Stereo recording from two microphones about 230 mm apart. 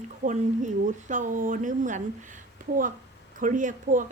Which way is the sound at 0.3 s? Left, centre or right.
Right.